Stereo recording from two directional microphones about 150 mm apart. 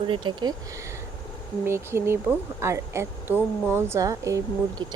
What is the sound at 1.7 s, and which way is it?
Speech, 15° right (ahead or behind).